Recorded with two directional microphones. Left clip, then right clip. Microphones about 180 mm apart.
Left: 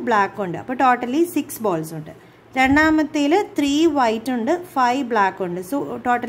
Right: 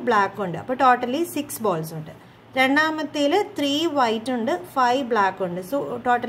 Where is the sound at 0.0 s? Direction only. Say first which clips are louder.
Left 2 dB; 20° left (ahead or behind).